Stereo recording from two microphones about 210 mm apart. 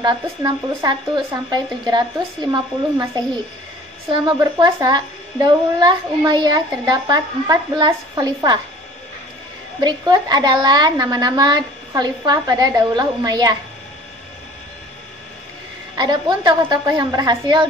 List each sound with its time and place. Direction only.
0.0 s a child's voice: 20° right (ahead or behind)
4.1 s a child's voice: 20° right (ahead or behind)
9.8 s a child's voice: 20° right (ahead or behind)
16.0 s a child's voice: 20° right (ahead or behind)